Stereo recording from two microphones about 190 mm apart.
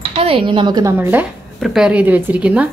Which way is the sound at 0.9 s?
10° right (ahead or behind).